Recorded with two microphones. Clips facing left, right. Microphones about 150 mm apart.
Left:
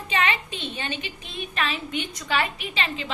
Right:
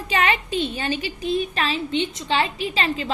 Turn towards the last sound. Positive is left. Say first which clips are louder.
# right 6 dB
turn(degrees=-35)  # may be behind; listen again after turning